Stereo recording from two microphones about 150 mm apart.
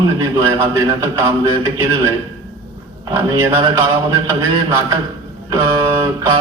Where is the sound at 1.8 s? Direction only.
15° right (ahead or behind).